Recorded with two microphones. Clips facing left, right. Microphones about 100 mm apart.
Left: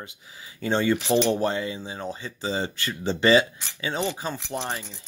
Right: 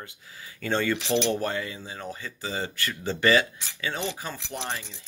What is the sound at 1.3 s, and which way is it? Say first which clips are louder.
Speech: left 4 dB; 25° left (ahead or behind).